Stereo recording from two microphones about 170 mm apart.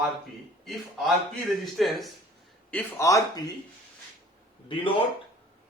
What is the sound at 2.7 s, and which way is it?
Speech, 10° left (ahead or behind).